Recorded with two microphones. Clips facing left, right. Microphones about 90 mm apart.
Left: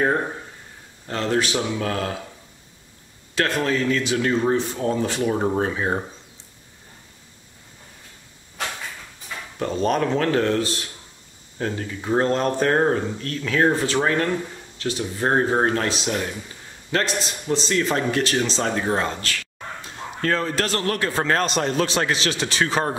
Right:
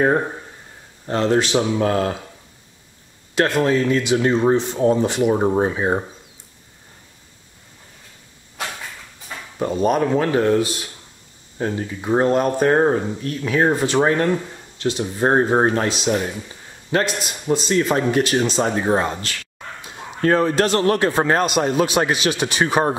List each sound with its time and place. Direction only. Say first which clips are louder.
1.0 s speech: right 5 dB; 25° right (ahead or behind)
3.3 s speech: right 5 dB; 20° right (ahead or behind)
9.6 s speech: right 3 dB; 10° right (ahead or behind)